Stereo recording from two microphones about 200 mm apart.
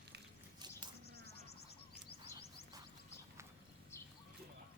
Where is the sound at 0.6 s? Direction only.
20° right (ahead or behind).